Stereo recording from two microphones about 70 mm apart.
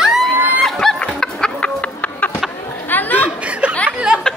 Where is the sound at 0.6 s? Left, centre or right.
Centre.